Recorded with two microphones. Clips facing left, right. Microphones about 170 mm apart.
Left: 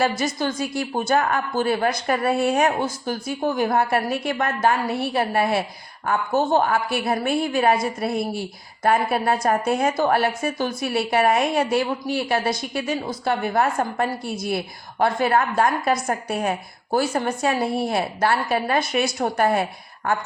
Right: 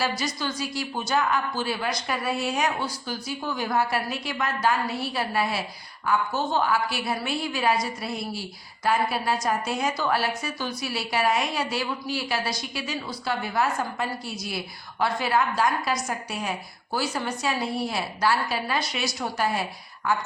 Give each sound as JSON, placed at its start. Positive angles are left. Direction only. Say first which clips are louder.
{"t": 0.2, "sound": "a woman's voice", "louder": "left 6 dB", "side_deg": 50}